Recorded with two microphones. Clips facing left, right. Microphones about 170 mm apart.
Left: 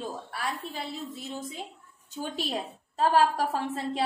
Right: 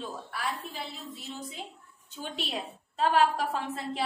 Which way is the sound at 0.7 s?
45° left (ahead or behind).